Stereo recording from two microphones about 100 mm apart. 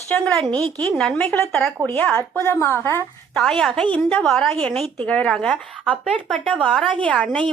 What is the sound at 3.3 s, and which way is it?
A woman's voice, 5° left (ahead or behind).